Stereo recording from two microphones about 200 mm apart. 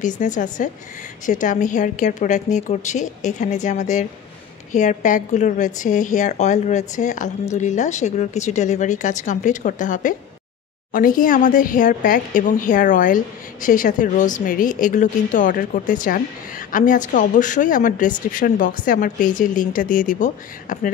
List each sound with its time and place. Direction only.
0.2 s speech: 40° left (ahead or behind)